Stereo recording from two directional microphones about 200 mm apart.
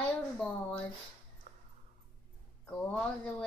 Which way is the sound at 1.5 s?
35° right (ahead or behind).